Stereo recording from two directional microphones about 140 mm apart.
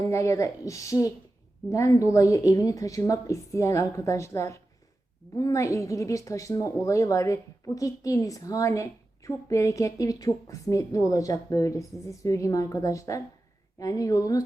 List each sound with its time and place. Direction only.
0.0 s a woman's voice: 20° left (ahead or behind)